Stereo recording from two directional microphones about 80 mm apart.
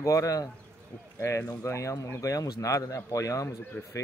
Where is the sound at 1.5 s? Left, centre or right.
Left.